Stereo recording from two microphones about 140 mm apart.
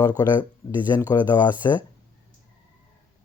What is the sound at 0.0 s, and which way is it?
Speech, 30° left (ahead or behind).